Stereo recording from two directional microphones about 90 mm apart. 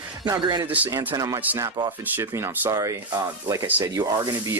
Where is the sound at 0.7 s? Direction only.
20° right (ahead or behind).